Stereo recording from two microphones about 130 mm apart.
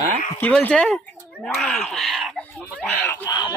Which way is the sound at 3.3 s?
30° left (ahead or behind).